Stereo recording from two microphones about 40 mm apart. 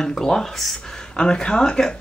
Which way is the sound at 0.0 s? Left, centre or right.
Centre.